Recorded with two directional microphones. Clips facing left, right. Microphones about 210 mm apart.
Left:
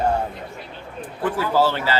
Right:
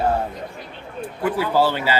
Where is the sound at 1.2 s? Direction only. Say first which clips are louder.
Right 1 dB; 15° right (ahead or behind).